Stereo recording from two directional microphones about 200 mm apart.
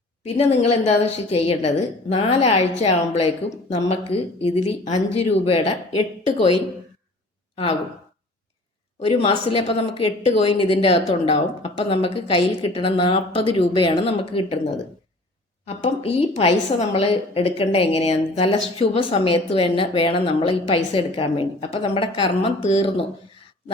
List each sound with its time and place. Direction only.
0.6 s a woman's voice: 30° left (ahead or behind)
9.0 s a woman's voice: 30° left (ahead or behind)
15.6 s a woman's voice: 30° left (ahead or behind)